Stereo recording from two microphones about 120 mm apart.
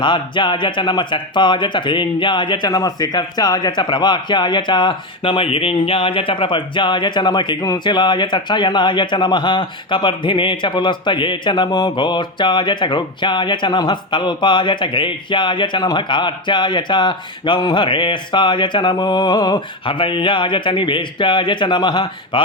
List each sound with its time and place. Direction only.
0.0 s speech: 45° left (ahead or behind)